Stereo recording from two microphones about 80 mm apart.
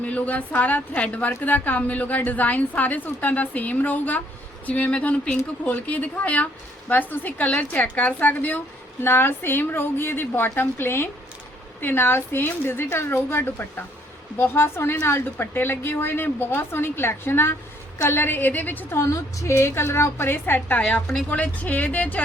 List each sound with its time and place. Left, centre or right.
0.0 s a woman's voice: centre
18.9 s a woman's voice: left; by 22.2 s centre